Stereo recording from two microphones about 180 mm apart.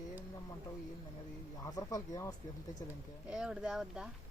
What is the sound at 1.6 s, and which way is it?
Speech, 20° left (ahead or behind).